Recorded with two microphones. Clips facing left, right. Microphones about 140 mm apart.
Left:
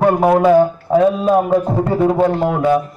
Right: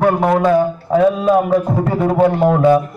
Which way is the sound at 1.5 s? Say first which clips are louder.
Even; 15° left (ahead or behind).